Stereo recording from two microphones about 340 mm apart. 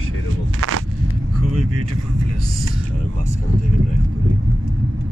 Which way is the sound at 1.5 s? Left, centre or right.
Right.